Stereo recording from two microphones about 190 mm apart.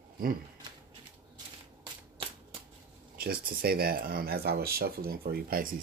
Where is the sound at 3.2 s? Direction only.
50° right (ahead or behind).